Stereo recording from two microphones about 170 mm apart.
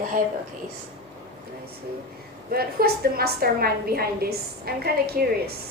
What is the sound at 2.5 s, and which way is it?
A woman's voice, 65° right (ahead or behind).